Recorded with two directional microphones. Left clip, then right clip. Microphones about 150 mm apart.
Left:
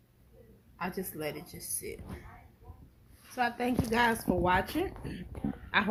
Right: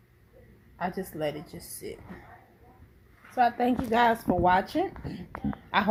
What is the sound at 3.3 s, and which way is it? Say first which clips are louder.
Speech: right 7 dB; 90° right.